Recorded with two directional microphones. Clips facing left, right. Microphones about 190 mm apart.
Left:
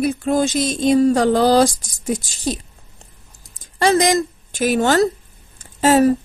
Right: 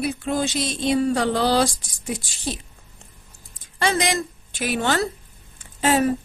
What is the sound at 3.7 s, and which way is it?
A woman's voice, 40° left (ahead or behind).